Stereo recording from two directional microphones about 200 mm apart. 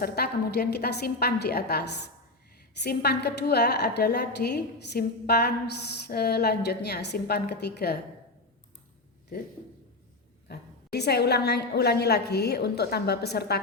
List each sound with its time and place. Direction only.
0.0 s a woman's voice: 50° left (ahead or behind)
10.5 s a woman's voice: 55° left (ahead or behind)